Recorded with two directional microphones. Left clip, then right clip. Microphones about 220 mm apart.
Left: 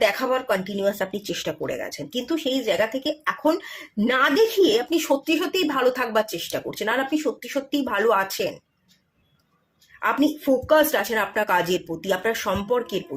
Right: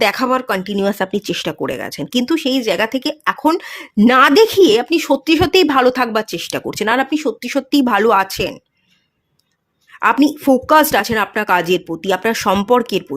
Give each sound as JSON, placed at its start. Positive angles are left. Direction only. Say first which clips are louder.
{"t": 0.0, "sound": "speech", "louder": "right 6 dB", "side_deg": -50}
{"t": 10.0, "sound": "speech", "louder": "right 8 dB", "side_deg": -50}